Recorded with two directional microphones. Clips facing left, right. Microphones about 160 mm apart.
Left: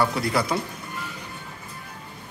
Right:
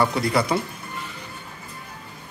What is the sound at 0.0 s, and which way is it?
Speech, centre (ahead or behind).